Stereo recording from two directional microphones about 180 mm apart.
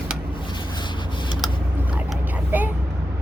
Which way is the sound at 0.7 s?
25° left (ahead or behind).